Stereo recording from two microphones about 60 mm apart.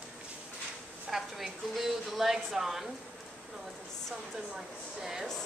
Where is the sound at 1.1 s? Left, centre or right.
Centre.